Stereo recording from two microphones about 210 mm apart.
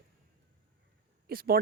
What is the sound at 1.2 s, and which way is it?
Speech, 45° right (ahead or behind).